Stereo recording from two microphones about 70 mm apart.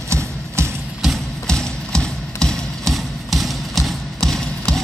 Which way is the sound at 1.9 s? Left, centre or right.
Centre.